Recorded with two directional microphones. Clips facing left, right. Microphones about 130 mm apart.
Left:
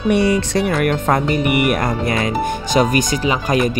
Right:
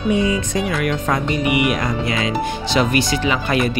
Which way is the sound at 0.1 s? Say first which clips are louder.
Left 3 dB; 75° left (ahead or behind).